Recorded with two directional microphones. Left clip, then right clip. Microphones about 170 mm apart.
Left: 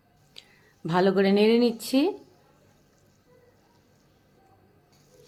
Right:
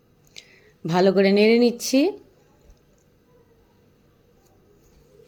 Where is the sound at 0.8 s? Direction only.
15° right (ahead or behind).